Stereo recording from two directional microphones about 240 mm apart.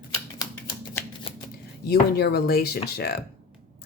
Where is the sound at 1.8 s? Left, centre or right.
Left.